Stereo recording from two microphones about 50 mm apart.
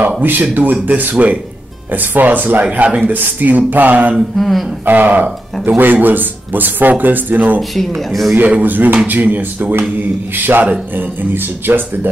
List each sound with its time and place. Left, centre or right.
0.2 s speech: right
2.6 s speech: right
3.1 s speech: right
4.4 s speech: centre
4.8 s speech: right
7.7 s speech: centre
8.4 s speech: right